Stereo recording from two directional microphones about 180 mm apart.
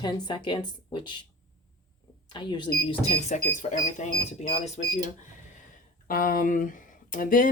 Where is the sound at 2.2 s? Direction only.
25° left (ahead or behind).